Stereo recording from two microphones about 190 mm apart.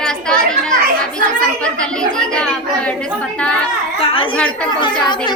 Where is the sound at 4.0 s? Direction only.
30° left (ahead or behind).